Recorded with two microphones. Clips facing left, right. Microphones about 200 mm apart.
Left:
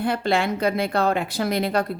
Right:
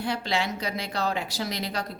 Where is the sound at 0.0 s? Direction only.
55° left (ahead or behind).